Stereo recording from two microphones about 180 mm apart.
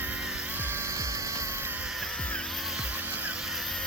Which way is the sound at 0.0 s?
5° right (ahead or behind).